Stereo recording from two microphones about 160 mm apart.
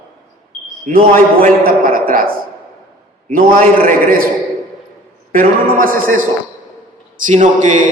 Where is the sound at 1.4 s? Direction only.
65° right (ahead or behind).